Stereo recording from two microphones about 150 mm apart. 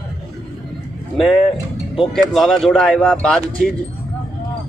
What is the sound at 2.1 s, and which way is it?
Speech, 5° left (ahead or behind).